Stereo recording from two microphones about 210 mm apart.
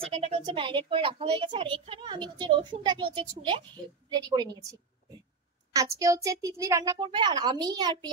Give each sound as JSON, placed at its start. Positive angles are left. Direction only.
{"t": 0.0, "sound": "a child's voice", "side_deg": -30}
{"t": 5.7, "sound": "a child's voice", "side_deg": -15}